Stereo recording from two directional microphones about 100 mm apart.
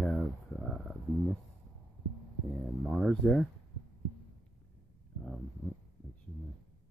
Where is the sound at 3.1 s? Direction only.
10° left (ahead or behind).